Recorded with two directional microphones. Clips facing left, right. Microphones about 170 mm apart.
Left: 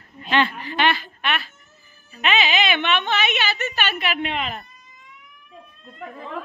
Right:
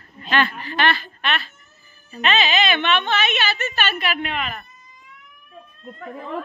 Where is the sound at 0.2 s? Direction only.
20° left (ahead or behind).